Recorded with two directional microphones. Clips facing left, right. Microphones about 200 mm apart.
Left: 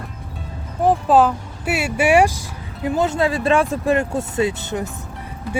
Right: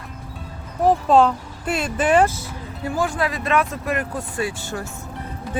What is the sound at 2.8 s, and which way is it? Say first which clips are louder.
Speech: left 4 dB; 20° left (ahead or behind).